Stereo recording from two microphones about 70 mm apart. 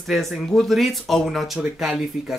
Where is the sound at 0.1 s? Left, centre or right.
Centre.